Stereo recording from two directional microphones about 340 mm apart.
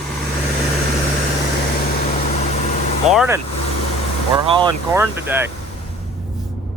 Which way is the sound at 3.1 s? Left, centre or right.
Centre.